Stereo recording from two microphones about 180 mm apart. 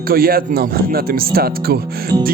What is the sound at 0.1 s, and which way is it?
Music, 55° right (ahead or behind).